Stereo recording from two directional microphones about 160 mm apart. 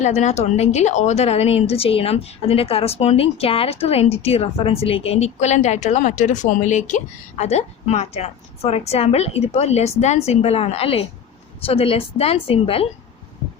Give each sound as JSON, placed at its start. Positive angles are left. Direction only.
{"t": 0.0, "sound": "a woman's voice", "side_deg": 45}